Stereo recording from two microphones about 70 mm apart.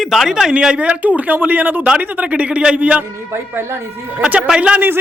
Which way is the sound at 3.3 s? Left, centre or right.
Right.